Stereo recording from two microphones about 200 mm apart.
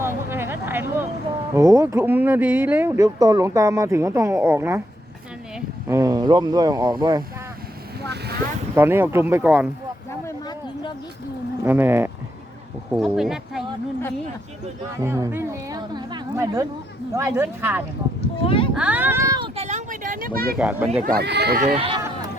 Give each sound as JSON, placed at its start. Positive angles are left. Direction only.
{"t": 0.0, "sound": "a sound", "side_deg": -10}
{"t": 1.5, "sound": "speech", "side_deg": -15}
{"t": 5.9, "sound": "speech", "side_deg": -20}
{"t": 8.0, "sound": "boat", "side_deg": -55}
{"t": 8.7, "sound": "speech", "side_deg": -10}
{"t": 11.6, "sound": "speech", "side_deg": -10}
{"t": 14.9, "sound": "speech", "side_deg": -15}
{"t": 18.4, "sound": "speech", "side_deg": 25}
{"t": 18.8, "sound": "speech", "side_deg": -5}
{"t": 19.5, "sound": "vehicle", "side_deg": -35}
{"t": 20.6, "sound": "speech", "side_deg": -5}
{"t": 21.0, "sound": "speech", "side_deg": -50}
{"t": 21.6, "sound": "speech", "side_deg": -30}